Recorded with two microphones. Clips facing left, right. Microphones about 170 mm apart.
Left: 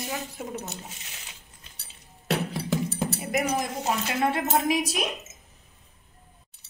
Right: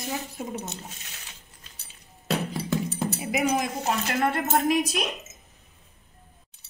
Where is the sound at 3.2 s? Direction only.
5° right (ahead or behind).